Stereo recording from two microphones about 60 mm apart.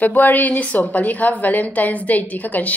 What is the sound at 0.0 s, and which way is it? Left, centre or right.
A woman's voice, left.